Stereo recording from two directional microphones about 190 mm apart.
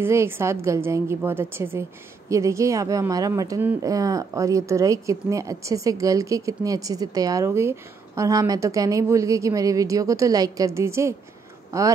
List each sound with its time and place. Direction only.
0.0 s a woman's voice: 15° right (ahead or behind)